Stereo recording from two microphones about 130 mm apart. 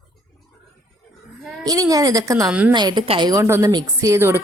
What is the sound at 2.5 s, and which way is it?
Speech, 10° right (ahead or behind).